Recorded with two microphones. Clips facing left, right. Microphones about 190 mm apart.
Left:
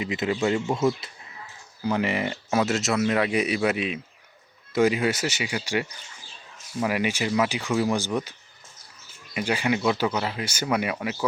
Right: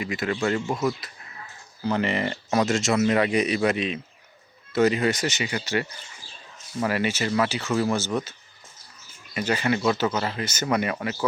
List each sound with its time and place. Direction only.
0.0 s speech: 20° left (ahead or behind)
0.8 s speech: 25° left (ahead or behind)
1.8 s speech: 10° left (ahead or behind)